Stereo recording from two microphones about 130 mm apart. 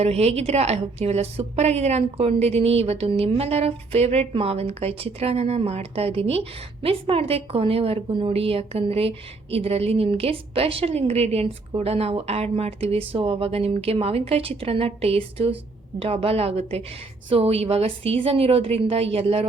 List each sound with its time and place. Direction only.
0.0 s a woman's voice: 55° right (ahead or behind)